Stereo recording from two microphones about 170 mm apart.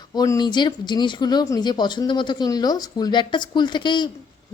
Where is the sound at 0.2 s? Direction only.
25° left (ahead or behind).